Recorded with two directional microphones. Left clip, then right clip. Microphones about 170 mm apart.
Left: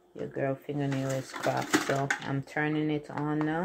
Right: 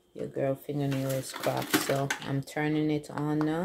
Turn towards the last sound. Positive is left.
turn(degrees=-5)  # may be behind; listen again after turning